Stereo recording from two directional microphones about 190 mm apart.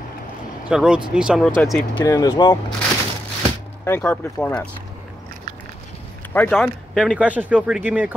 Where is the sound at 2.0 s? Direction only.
20° left (ahead or behind).